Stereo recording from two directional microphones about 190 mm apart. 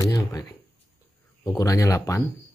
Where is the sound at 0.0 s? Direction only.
20° left (ahead or behind).